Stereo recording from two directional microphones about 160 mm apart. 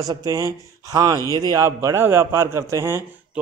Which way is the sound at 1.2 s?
20° left (ahead or behind).